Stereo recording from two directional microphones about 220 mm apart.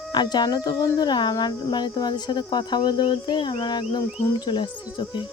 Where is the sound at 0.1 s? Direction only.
20° left (ahead or behind).